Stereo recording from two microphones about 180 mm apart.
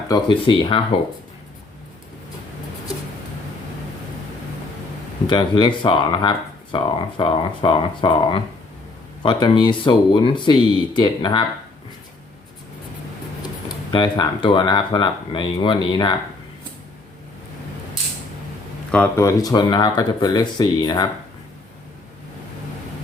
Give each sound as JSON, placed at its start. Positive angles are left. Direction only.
{"t": 0.1, "sound": "speech", "side_deg": 25}
{"t": 5.3, "sound": "speech", "side_deg": 25}
{"t": 13.9, "sound": "speech", "side_deg": 25}
{"t": 18.9, "sound": "speech", "side_deg": 10}